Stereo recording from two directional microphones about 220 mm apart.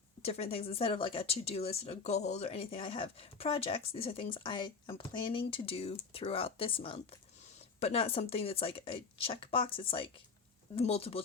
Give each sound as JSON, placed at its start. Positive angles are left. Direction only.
{"t": 0.2, "sound": "speech", "side_deg": 25}